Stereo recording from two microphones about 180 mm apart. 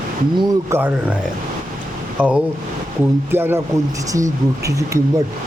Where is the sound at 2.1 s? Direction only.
5° right (ahead or behind).